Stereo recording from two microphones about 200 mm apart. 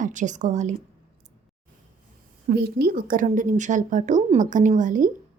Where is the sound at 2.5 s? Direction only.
55° right (ahead or behind); by 5.1 s 40° right (ahead or behind).